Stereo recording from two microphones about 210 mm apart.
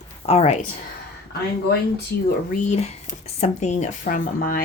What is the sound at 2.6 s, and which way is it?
Speech, 35° left (ahead or behind).